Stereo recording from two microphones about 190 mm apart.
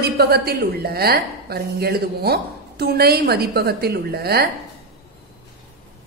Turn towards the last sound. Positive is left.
turn(degrees=-55)  # may be behind; listen again after turning